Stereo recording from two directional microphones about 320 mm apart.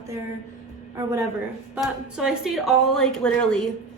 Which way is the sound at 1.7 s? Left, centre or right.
Centre.